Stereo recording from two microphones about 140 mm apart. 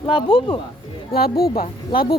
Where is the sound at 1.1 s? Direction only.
90° left.